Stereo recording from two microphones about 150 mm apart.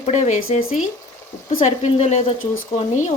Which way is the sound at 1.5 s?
50° left (ahead or behind).